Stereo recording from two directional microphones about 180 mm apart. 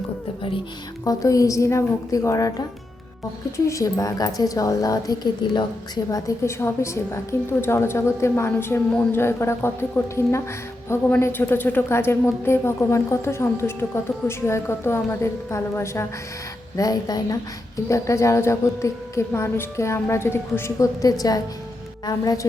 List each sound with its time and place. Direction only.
1.0 s a woman's voice: 20° left (ahead or behind)
3.7 s a woman's voice: 15° left (ahead or behind)